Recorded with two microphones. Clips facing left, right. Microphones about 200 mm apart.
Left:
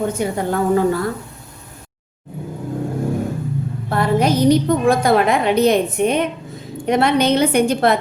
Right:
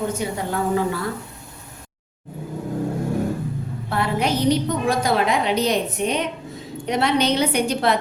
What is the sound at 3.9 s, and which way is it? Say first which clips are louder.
A woman's voice: left 5 dB; 40° left (ahead or behind).